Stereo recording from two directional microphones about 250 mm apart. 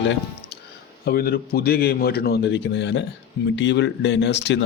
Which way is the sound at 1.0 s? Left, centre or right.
Left.